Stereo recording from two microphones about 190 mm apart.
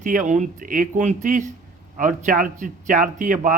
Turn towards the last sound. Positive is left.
turn(degrees=-45)  # may be behind; listen again after turning